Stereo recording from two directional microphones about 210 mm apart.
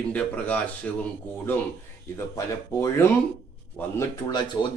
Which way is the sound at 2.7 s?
15° left (ahead or behind).